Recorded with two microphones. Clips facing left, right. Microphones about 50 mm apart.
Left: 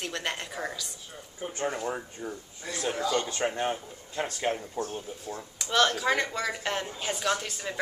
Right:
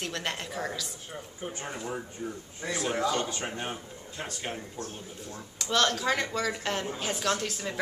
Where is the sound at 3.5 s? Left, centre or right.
Centre.